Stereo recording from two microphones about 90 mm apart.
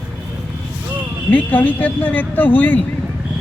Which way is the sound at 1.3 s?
20° left (ahead or behind).